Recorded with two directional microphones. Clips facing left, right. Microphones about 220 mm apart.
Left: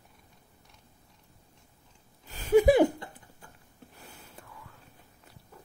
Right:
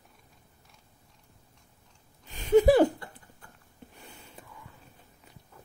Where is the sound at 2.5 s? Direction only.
15° left (ahead or behind).